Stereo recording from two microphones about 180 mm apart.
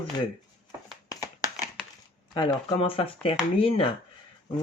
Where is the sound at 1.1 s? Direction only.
20° left (ahead or behind).